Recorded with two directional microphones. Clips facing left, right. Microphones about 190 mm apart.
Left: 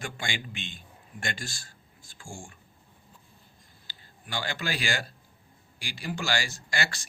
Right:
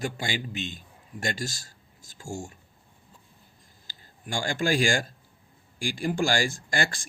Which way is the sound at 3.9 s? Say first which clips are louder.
Right 3 dB; 45° right (ahead or behind).